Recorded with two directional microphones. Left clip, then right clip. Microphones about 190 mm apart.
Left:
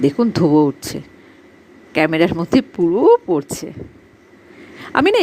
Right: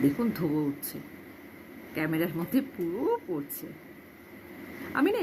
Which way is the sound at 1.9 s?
45° left (ahead or behind).